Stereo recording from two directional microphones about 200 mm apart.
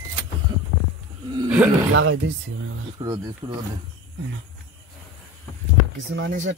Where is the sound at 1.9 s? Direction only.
75° right (ahead or behind).